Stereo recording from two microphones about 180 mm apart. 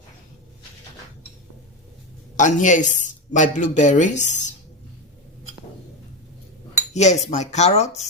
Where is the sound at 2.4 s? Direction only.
45° left (ahead or behind).